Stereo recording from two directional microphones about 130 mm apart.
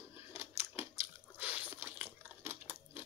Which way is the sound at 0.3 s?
20° right (ahead or behind).